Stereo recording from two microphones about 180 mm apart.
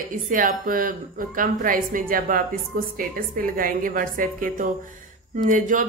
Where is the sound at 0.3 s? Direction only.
50° right (ahead or behind).